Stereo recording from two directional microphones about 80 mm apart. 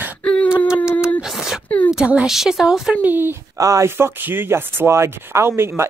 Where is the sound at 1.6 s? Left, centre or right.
Left.